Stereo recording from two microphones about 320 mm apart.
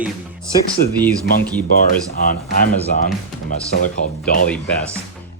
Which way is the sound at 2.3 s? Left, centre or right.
Left.